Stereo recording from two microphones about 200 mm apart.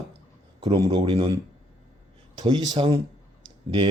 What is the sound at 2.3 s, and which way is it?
Speech, 20° right (ahead or behind).